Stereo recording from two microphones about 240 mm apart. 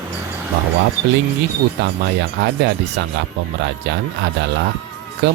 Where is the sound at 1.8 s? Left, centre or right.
Right.